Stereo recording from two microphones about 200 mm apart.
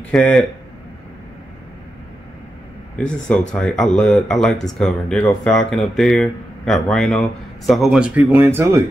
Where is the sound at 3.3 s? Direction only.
5° left (ahead or behind).